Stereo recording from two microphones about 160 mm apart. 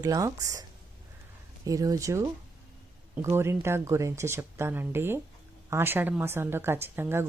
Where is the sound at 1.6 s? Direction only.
20° right (ahead or behind).